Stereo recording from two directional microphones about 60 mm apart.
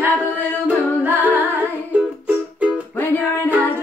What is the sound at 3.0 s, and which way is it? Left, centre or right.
Music, left.